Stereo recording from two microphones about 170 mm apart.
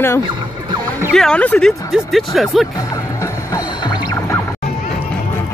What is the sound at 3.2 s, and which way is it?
Music, 20° left (ahead or behind).